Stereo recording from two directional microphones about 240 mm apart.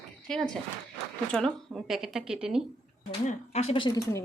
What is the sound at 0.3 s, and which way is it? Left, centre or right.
A woman's voice, centre.